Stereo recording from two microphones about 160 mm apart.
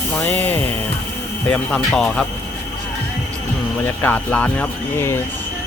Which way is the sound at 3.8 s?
10° left (ahead or behind).